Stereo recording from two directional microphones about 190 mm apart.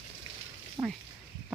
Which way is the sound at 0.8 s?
20° right (ahead or behind).